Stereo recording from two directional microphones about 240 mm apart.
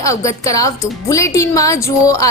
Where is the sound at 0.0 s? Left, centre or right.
Centre.